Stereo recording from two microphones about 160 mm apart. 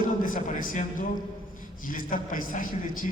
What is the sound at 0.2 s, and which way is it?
A man's voice, 55° left (ahead or behind).